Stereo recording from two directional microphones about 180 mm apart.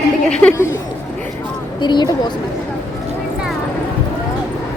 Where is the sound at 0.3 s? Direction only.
5° left (ahead or behind).